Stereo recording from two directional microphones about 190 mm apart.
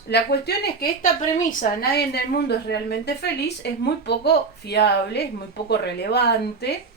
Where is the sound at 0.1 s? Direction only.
60° left (ahead or behind).